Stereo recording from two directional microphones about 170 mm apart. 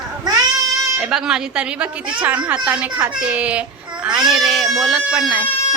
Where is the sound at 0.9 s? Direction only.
Centre (ahead or behind).